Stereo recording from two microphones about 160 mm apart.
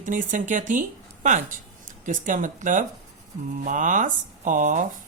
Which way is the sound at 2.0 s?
55° right (ahead or behind).